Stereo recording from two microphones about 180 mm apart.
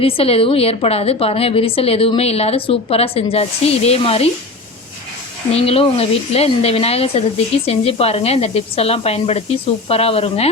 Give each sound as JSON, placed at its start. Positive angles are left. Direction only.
{"t": 0.0, "sound": "a woman's voice", "side_deg": 30}
{"t": 5.5, "sound": "a woman's voice", "side_deg": 35}